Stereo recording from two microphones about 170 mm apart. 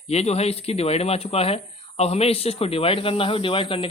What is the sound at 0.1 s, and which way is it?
Speech, 40° left (ahead or behind).